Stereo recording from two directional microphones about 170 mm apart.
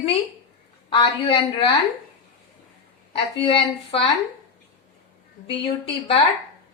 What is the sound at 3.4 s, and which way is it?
Speech, 35° left (ahead or behind).